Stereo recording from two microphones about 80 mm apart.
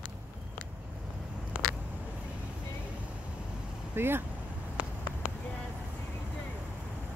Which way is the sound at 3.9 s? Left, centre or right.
Right.